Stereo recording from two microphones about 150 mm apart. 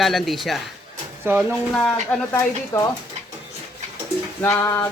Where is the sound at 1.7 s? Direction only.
10° left (ahead or behind).